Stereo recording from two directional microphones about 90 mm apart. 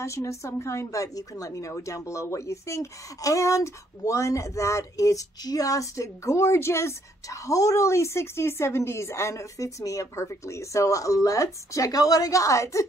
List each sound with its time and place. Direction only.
0.0 s a woman's voice: 35° left (ahead or behind)